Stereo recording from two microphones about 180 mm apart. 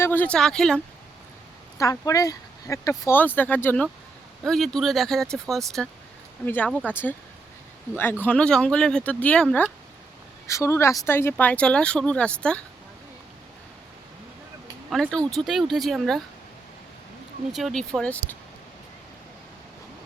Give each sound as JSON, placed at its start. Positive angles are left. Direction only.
{"t": 0.0, "sound": "speech", "side_deg": 10}
{"t": 1.8, "sound": "speech", "side_deg": 20}
{"t": 8.2, "sound": "speech", "side_deg": 5}
{"t": 10.4, "sound": "speech", "side_deg": 15}
{"t": 14.8, "sound": "speech", "side_deg": 0}
{"t": 17.5, "sound": "speech", "side_deg": 0}